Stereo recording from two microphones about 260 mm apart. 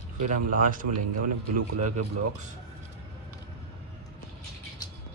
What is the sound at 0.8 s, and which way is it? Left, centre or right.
Speech, right.